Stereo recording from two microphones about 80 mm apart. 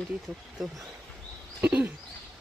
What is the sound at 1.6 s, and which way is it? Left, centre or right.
Speech, centre.